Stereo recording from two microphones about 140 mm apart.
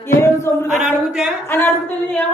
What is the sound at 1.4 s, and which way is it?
Speech, 15° left (ahead or behind).